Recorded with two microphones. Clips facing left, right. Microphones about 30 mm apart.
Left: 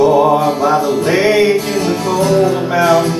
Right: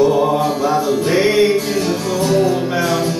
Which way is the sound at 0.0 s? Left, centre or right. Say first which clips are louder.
Left 4 dB; centre.